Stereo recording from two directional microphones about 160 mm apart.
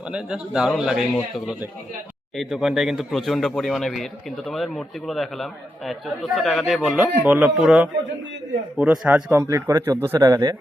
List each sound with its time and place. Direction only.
0.1 s a man's voice: 5° right (ahead or behind); by 10.6 s 20° right (ahead or behind)